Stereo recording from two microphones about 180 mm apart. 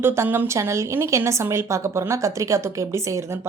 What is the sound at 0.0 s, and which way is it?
A woman's voice, 15° right (ahead or behind).